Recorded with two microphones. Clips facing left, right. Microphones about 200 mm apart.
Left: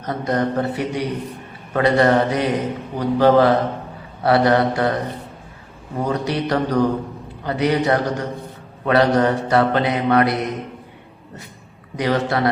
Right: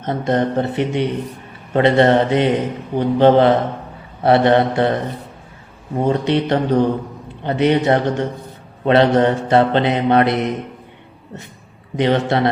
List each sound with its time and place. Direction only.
0.0 s mantra: 25° right (ahead or behind)
6.0 s mantra: 25° right (ahead or behind)
11.9 s mantra: 25° right (ahead or behind)